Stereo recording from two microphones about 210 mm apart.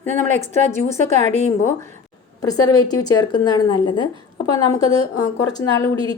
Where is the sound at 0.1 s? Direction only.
35° right (ahead or behind).